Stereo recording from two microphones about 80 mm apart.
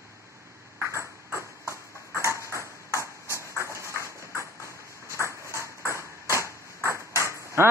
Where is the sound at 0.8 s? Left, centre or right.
Right.